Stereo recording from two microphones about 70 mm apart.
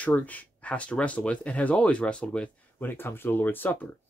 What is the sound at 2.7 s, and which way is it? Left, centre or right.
Speech, left.